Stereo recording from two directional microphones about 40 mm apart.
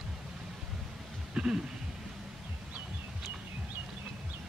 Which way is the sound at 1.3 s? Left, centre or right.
Right.